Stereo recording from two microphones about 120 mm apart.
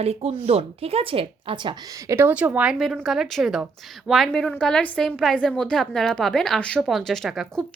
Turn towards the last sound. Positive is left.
turn(degrees=-5)  # may be behind; listen again after turning